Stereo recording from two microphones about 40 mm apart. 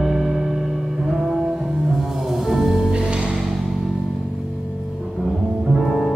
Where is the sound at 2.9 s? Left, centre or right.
Right.